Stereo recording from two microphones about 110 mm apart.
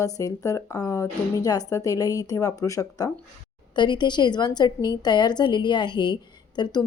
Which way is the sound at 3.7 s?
45° left (ahead or behind).